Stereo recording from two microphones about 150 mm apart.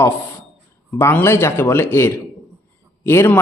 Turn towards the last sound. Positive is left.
turn(degrees=15)  # may be behind; listen again after turning